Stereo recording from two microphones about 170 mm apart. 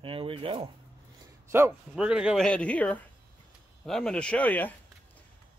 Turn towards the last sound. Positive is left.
turn(degrees=10)  # may be behind; listen again after turning